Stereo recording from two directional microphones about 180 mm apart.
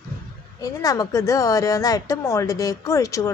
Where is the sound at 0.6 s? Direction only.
20° left (ahead or behind).